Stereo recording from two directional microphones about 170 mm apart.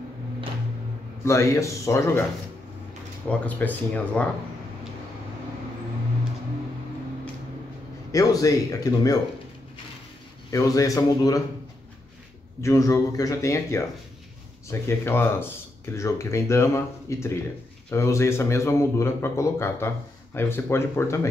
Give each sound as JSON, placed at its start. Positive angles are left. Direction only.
{"t": 1.2, "sound": "a man's voice", "side_deg": 15}
{"t": 3.3, "sound": "a man's voice", "side_deg": 10}
{"t": 8.1, "sound": "speech", "side_deg": 20}
{"t": 10.5, "sound": "speech", "side_deg": 20}
{"t": 12.6, "sound": "a man's voice", "side_deg": 20}